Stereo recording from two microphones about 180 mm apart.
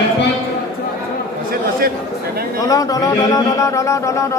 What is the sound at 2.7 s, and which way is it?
Speech, 20° left (ahead or behind).